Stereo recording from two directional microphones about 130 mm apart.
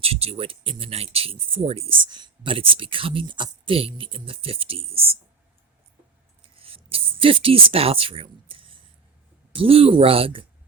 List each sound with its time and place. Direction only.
0.0 s speech: 50° right (ahead or behind)
2.0 s speech: 35° right (ahead or behind)
6.6 s a sound: 45° right (ahead or behind)
9.5 s speech: 45° right (ahead or behind)